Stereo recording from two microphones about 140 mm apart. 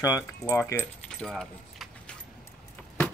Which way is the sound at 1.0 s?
5° left (ahead or behind).